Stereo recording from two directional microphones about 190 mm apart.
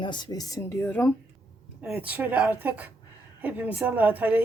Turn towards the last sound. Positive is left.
turn(degrees=-10)  # may be behind; listen again after turning